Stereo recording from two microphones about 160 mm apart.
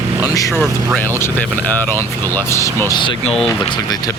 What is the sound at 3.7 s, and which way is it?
Speech, 25° left (ahead or behind).